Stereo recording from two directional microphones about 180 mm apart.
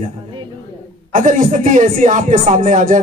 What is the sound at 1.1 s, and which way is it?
Speech, 45° right (ahead or behind).